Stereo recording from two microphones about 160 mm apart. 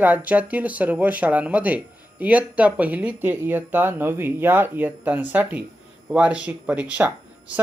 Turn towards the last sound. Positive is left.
turn(degrees=-10)  # may be behind; listen again after turning